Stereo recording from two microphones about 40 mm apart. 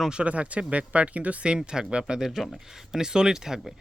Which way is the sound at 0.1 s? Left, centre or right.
Right.